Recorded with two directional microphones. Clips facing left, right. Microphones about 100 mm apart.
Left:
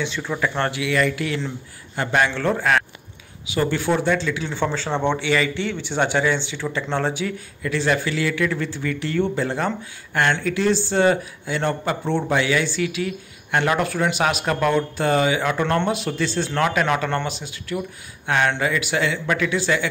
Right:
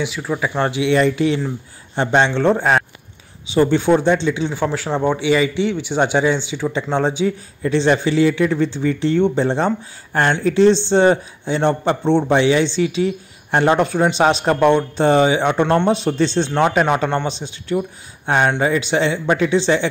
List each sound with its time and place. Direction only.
0.0 s a man's voice: 10° right (ahead or behind)
4.6 s a man's voice: 10° right (ahead or behind); by 19.9 s 25° right (ahead or behind)